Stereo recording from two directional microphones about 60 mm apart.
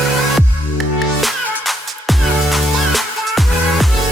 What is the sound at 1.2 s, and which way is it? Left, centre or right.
Music, centre.